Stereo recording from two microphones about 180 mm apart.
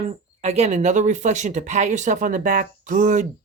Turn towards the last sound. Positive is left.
turn(degrees=-45)  # may be behind; listen again after turning